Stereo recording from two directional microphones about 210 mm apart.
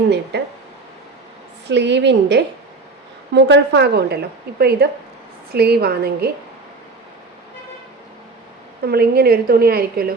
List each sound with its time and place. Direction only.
1.6 s a woman's voice: 55° right (ahead or behind)
8.8 s a woman's voice: 50° right (ahead or behind)